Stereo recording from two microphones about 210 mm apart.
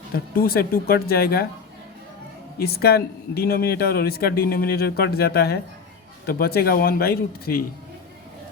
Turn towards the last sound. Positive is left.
turn(degrees=45)  # may be behind; listen again after turning